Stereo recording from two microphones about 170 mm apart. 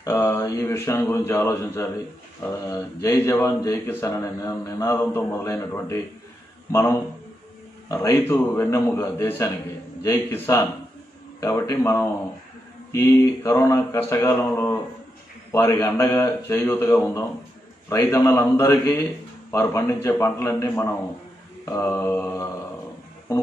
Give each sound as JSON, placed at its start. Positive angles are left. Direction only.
{"t": 0.0, "sound": "speech", "side_deg": 15}